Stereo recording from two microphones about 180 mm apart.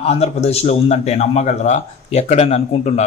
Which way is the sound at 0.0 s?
35° left (ahead or behind).